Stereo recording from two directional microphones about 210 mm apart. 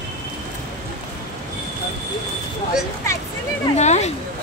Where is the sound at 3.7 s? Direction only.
30° left (ahead or behind).